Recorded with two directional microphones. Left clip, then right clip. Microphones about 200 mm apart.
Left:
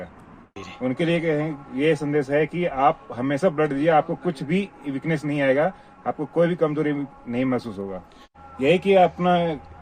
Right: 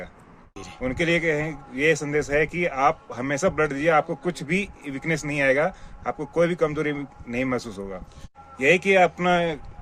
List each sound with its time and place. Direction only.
0.5 s a sound: 55° right (ahead or behind)
0.8 s a man's voice: 20° right (ahead or behind)
8.5 s a man's voice: 10° right (ahead or behind)